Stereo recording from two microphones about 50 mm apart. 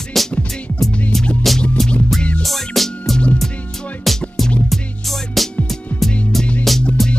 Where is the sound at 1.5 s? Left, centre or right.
Centre.